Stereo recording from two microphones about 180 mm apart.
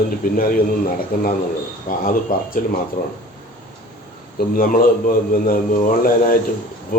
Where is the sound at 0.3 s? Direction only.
55° left (ahead or behind).